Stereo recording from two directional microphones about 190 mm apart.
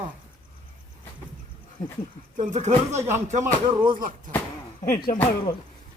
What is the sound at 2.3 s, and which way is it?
Speech, 40° right (ahead or behind).